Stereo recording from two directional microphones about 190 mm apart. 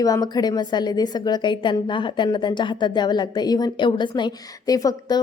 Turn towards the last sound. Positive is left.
turn(degrees=20)  # may be behind; listen again after turning